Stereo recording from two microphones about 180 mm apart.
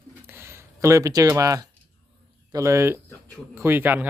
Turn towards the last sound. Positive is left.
turn(degrees=-10)  # may be behind; listen again after turning